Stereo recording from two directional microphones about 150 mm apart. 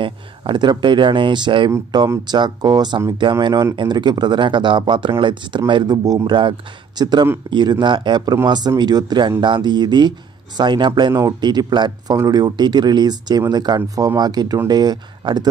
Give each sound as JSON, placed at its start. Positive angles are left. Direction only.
{"t": 0.0, "sound": "speech", "side_deg": -35}